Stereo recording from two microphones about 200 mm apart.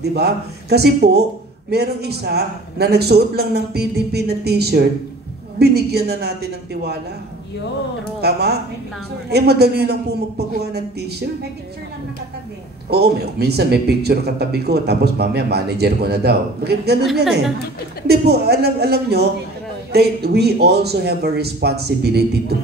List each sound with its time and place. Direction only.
0.0 s speech: 55° right (ahead or behind)
8.2 s speech: 55° right (ahead or behind)
12.9 s speech: 55° right (ahead or behind)
17.0 s a woman's voice: centre (ahead or behind)
18.0 s speech: 55° right (ahead or behind)